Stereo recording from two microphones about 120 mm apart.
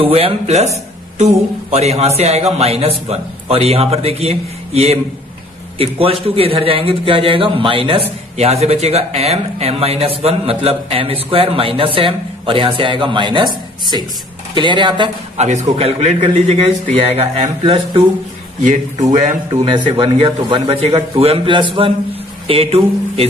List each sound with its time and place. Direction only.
0.0 s a man's voice: 55° right (ahead or behind)
8.4 s a man's voice: 60° right (ahead or behind); by 15.0 s 40° right (ahead or behind)
15.3 s a man's voice: 70° right (ahead or behind); by 18.0 s 50° right (ahead or behind)
19.0 s speech: 75° right (ahead or behind)
19.6 s a man's voice: 45° right (ahead or behind)